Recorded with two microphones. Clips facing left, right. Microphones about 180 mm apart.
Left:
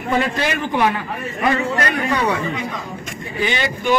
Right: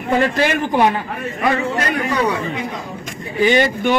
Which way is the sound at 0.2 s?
45° right (ahead or behind).